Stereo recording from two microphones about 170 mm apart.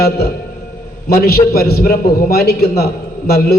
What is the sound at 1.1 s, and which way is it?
A man's voice, 65° left (ahead or behind).